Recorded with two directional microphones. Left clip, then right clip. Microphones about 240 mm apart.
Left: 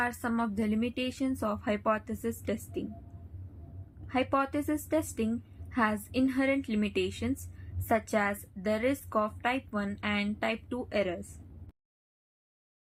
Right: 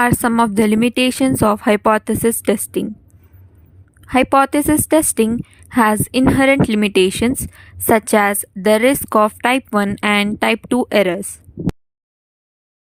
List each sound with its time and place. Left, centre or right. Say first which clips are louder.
0.0 s a woman's voice: right 17 dB; right
4.0 s a woman's voice: right 16 dB; right